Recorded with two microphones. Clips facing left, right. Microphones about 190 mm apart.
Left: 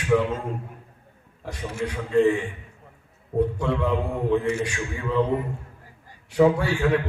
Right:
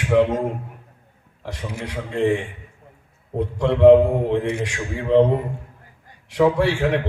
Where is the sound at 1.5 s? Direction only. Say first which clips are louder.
Left 1 dB; 85° right.